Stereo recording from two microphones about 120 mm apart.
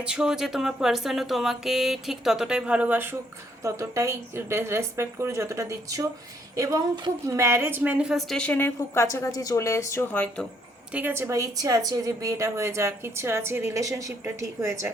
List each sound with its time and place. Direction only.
0.0 s a woman's voice: 5° right (ahead or behind); by 7.1 s 35° right (ahead or behind)
7.3 s a woman's voice: 25° right (ahead or behind); by 10.4 s 15° left (ahead or behind)
10.9 s a woman's voice: 20° right (ahead or behind)